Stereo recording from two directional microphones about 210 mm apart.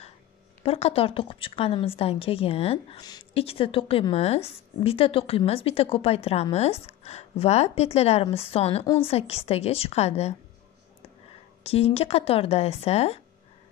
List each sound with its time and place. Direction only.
0.7 s a woman's voice: 30° left (ahead or behind)
11.6 s a woman's voice: 30° left (ahead or behind)